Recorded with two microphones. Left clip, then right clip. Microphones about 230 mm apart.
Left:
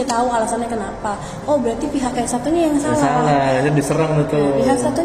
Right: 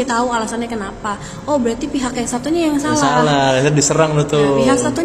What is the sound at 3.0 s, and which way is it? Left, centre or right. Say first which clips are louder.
Speech: right 3 dB; right.